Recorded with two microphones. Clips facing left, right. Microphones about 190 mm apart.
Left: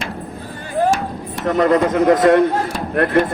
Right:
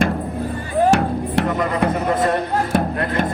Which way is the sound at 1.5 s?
85° left.